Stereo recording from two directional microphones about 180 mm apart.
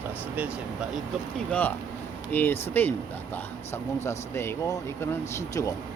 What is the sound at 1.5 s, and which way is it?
Speech, 10° left (ahead or behind).